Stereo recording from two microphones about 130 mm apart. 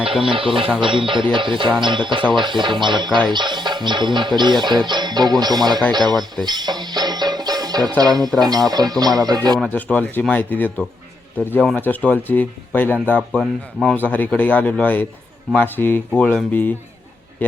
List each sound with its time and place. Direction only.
0.0 s speech: 45° right (ahead or behind)
6.4 s music: 35° right (ahead or behind)
8.4 s speech: 30° right (ahead or behind)
9.7 s speech: 10° left (ahead or behind)
13.4 s speech: centre (ahead or behind)
13.9 s speech: 15° left (ahead or behind)